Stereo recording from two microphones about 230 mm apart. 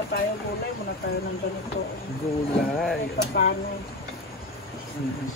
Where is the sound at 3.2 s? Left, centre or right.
Left.